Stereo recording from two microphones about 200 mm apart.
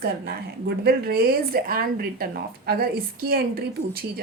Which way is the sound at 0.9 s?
50° right (ahead or behind).